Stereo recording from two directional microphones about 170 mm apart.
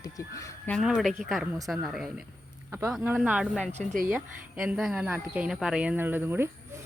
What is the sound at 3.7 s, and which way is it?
Speech, 40° right (ahead or behind).